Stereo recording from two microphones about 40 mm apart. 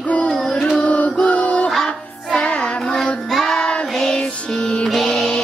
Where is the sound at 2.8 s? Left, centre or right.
Centre.